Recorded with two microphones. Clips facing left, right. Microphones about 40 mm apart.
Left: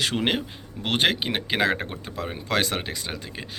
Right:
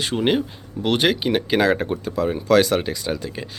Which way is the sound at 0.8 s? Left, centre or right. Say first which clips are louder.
Right 4 dB; left.